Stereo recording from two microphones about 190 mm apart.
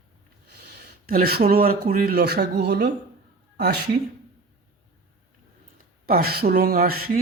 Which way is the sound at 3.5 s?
55° right (ahead or behind).